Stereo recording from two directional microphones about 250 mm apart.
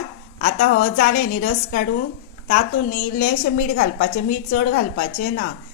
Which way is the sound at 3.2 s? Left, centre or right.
Left.